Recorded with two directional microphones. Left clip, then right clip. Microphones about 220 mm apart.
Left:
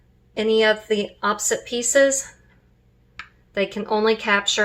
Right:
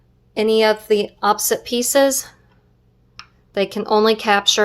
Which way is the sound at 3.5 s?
45° right (ahead or behind).